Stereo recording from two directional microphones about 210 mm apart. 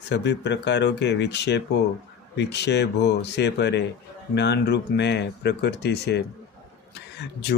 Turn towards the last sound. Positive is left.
turn(degrees=55)  # may be behind; listen again after turning